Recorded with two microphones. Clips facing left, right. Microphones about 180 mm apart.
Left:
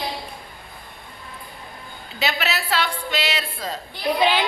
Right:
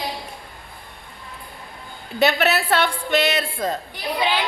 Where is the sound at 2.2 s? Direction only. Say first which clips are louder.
Right 7 dB; 55° right (ahead or behind).